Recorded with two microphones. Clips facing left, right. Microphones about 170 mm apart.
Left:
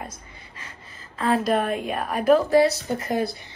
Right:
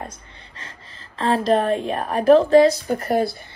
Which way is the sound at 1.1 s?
35° right (ahead or behind).